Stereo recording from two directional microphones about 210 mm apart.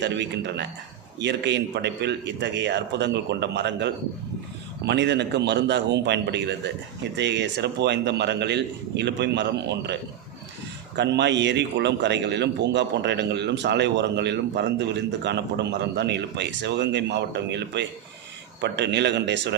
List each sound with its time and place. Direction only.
0.0 s a man's voice: 55° right (ahead or behind)